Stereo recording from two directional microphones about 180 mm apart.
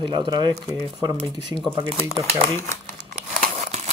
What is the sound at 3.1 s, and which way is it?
Crumpling, 40° right (ahead or behind).